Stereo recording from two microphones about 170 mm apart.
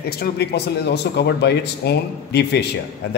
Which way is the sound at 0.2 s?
75° left (ahead or behind).